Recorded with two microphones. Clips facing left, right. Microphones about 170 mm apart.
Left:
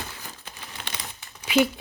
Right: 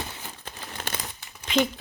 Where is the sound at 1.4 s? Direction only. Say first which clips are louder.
Left 3 dB; 10° left (ahead or behind).